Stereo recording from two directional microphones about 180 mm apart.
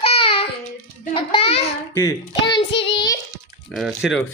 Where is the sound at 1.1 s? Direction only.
30° left (ahead or behind).